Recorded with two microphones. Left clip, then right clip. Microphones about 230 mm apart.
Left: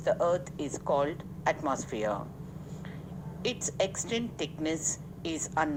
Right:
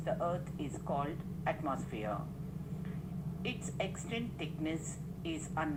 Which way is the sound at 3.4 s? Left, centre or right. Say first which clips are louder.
Left 9 dB; left.